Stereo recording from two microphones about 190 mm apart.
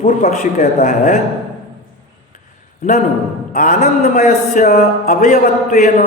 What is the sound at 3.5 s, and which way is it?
A man's voice, 40° left (ahead or behind).